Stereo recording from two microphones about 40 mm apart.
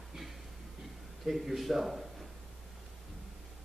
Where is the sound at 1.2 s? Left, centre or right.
Centre.